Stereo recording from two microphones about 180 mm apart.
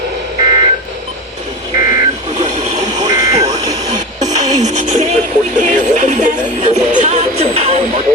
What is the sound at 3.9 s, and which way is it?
Music, 45° right (ahead or behind).